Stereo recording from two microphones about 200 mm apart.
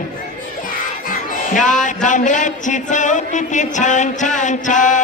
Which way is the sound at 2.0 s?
40° left (ahead or behind).